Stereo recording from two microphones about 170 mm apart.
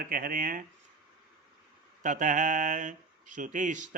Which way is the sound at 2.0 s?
50° right (ahead or behind).